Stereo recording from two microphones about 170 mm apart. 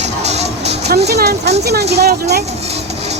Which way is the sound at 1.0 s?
75° right (ahead or behind).